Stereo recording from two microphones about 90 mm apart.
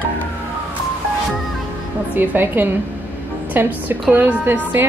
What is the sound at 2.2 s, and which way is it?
A woman's voice, 20° right (ahead or behind).